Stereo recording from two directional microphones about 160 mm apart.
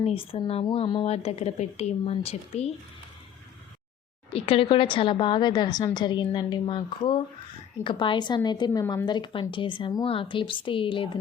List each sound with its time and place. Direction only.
0.0 s a woman's voice: 35° left (ahead or behind)
1.0 s a woman's voice: 40° left (ahead or behind)
4.3 s a woman's voice: 35° left (ahead or behind)